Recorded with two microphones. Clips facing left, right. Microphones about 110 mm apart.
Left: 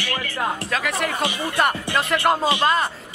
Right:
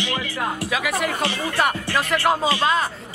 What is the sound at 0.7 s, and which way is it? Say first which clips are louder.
Music: right 3 dB; 5° right (ahead or behind).